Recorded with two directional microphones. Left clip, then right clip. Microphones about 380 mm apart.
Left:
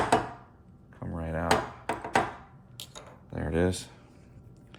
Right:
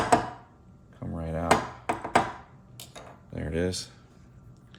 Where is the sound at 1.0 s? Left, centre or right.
Centre.